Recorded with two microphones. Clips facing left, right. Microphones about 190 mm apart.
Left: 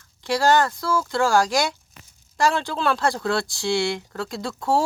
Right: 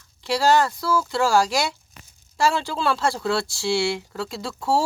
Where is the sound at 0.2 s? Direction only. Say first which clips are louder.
Even; 5° right (ahead or behind).